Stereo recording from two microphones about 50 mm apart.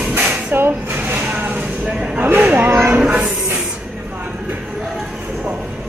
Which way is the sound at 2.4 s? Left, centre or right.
Right.